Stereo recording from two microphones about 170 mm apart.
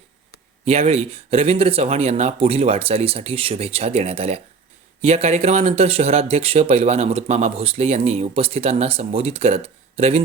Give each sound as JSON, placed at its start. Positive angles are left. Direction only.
{"t": 0.6, "sound": "speech", "side_deg": -35}